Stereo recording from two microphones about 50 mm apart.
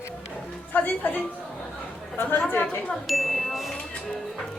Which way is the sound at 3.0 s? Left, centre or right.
Centre.